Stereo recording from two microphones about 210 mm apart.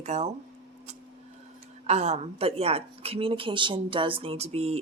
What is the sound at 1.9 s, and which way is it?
Speech, 30° right (ahead or behind).